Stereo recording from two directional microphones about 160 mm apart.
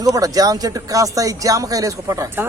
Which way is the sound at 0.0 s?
20° right (ahead or behind).